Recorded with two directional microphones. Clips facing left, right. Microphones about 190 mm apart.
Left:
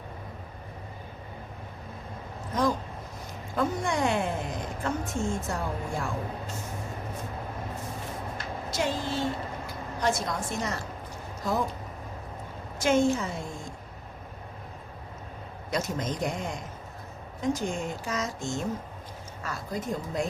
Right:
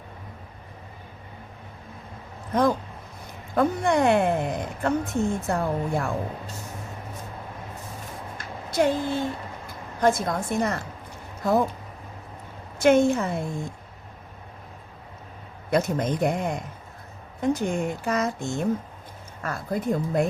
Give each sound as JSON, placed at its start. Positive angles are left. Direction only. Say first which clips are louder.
{"t": 3.5, "sound": "a woman's voice", "louder": "right 6 dB", "side_deg": -60}
{"t": 8.7, "sound": "a woman's voice", "louder": "right 7 dB", "side_deg": -55}
{"t": 12.8, "sound": "a woman's voice", "louder": "right 5 dB", "side_deg": -60}
{"t": 15.7, "sound": "a woman's voice", "louder": "right 7 dB", "side_deg": -60}